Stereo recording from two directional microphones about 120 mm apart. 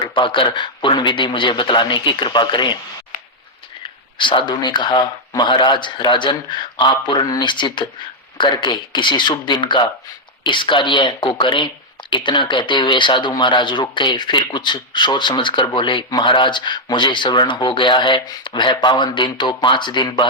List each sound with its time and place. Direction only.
0.0 s speech: 45° left (ahead or behind)
4.2 s speech: 40° left (ahead or behind)